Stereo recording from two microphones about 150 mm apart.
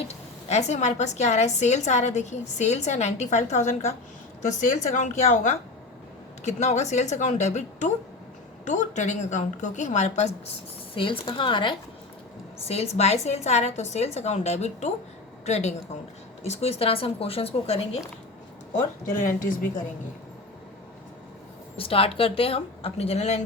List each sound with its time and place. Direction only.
0.1 s a woman's voice: 45° left (ahead or behind)
10.9 s speech: 35° left (ahead or behind)
12.6 s a woman's voice: 45° left (ahead or behind)
19.4 s a woman's voice: 65° left (ahead or behind)
21.8 s speech: 40° left (ahead or behind)